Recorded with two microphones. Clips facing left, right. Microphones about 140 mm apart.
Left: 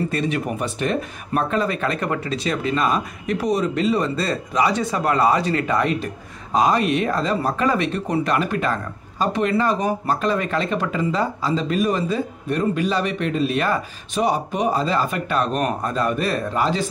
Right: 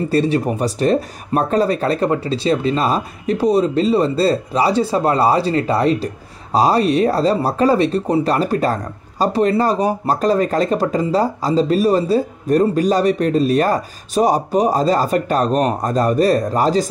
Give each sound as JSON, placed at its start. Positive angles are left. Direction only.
{"t": 0.1, "sound": "speech", "side_deg": -35}